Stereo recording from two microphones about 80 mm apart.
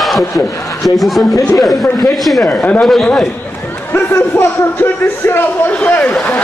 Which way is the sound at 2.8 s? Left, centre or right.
Centre.